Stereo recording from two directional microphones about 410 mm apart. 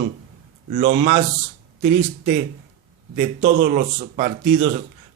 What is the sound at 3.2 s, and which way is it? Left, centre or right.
A man's voice, centre.